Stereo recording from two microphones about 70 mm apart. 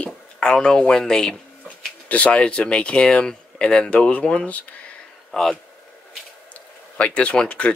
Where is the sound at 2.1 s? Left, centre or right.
Centre.